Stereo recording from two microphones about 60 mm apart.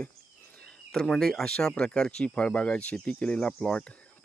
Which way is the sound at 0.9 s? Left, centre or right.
Centre.